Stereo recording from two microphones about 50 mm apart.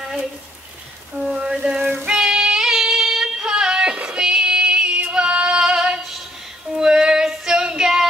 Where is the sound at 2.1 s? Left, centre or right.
Centre.